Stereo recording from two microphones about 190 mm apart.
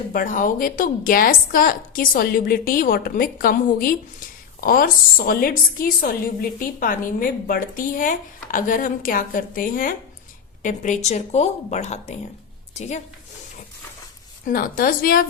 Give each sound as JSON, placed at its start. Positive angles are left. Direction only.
{"t": 0.1, "sound": "a woman's voice", "side_deg": 45}
{"t": 14.4, "sound": "a woman's voice", "side_deg": 50}